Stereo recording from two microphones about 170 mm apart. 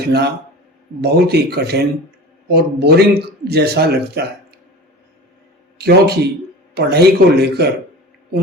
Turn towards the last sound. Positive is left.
turn(degrees=-70)  # may be behind; listen again after turning